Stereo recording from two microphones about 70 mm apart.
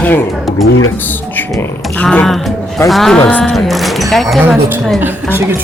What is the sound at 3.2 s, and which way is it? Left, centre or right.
Speech, left.